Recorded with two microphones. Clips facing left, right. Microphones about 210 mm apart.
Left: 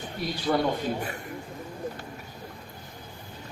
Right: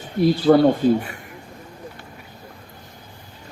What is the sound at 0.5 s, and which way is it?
Speech, 50° right (ahead or behind).